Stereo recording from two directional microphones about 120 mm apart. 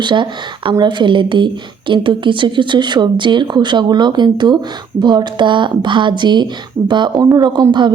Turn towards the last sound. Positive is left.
turn(degrees=-40)  # may be behind; listen again after turning